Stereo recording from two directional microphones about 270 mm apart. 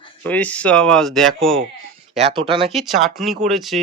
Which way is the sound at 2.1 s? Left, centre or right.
Right.